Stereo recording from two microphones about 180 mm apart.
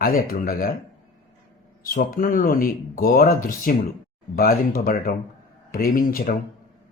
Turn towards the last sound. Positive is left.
turn(degrees=50)  # may be behind; listen again after turning